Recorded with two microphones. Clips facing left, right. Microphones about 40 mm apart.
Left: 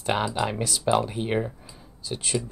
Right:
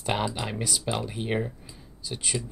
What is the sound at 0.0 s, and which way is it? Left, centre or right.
Speech, centre.